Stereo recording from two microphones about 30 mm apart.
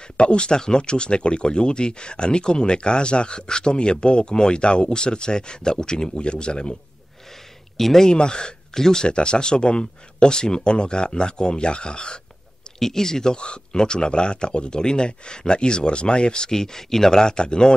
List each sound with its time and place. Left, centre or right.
0.2 s speech: left
6.2 s speech: left
7.7 s speech: centre
8.1 s speech: left
8.7 s speech: centre
9.0 s speech: left
12.7 s speech: centre